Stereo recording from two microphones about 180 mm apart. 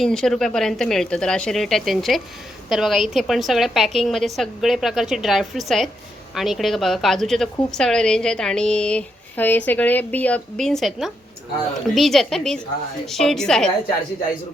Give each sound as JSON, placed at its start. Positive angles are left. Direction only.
{"t": 0.0, "sound": "a woman's voice", "side_deg": 5}